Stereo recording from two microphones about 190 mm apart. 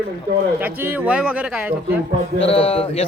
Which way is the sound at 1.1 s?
5° right (ahead or behind).